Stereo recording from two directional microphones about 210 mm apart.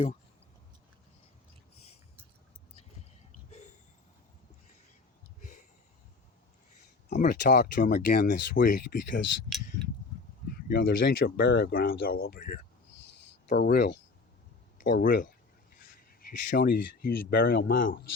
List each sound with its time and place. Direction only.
5.4 s a sound: 40° left (ahead or behind)
7.1 s speech: 40° left (ahead or behind)
10.7 s speech: 45° left (ahead or behind)
13.5 s speech: 45° left (ahead or behind)
16.6 s speech: 45° left (ahead or behind)